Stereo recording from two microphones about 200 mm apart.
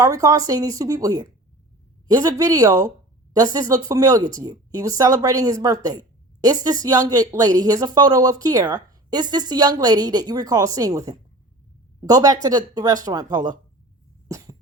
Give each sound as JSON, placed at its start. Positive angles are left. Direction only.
{"t": 0.0, "sound": "speech", "side_deg": -15}
{"t": 14.3, "sound": "cough", "side_deg": -15}